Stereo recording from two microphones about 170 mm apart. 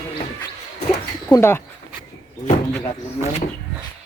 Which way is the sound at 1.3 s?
15° left (ahead or behind).